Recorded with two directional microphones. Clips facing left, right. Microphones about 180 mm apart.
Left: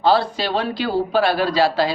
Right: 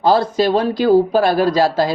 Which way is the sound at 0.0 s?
45° right (ahead or behind).